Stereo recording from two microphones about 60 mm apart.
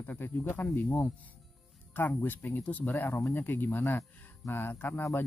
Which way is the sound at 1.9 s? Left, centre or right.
Left.